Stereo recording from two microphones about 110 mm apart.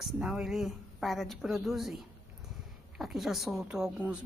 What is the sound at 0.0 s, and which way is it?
Speech, 5° right (ahead or behind).